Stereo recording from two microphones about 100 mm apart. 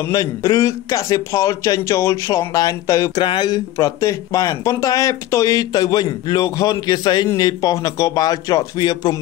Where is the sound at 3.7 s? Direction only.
30° left (ahead or behind).